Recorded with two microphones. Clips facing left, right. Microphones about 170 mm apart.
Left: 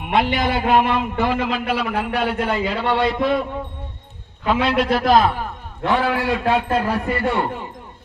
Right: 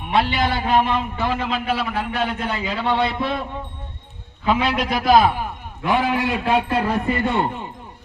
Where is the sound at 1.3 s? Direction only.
10° left (ahead or behind).